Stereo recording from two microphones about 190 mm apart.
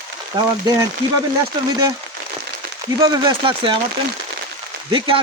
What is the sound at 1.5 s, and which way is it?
Speech, 20° right (ahead or behind).